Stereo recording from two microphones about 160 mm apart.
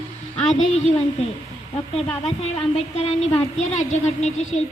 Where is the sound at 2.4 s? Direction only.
40° left (ahead or behind).